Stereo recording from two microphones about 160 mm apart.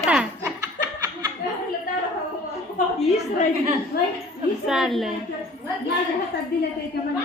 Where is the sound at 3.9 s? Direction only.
80° left.